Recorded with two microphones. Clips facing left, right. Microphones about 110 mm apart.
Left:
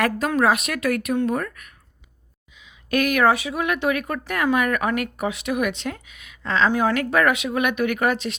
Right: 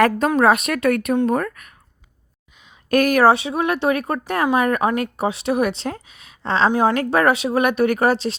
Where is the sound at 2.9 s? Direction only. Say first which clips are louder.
Right 4 dB; 40° right (ahead or behind).